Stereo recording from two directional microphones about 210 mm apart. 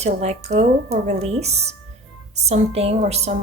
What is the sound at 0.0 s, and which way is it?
A woman's voice, 30° right (ahead or behind).